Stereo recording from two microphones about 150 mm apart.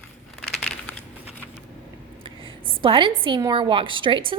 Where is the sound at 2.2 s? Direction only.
35° right (ahead or behind).